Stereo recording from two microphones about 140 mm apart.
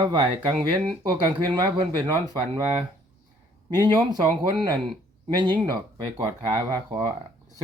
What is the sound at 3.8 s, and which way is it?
A man's voice, 30° right (ahead or behind).